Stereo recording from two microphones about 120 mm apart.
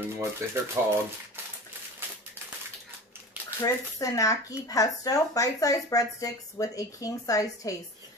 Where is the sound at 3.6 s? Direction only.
30° left (ahead or behind).